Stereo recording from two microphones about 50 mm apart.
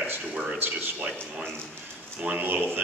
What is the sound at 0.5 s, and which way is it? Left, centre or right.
Speech, right.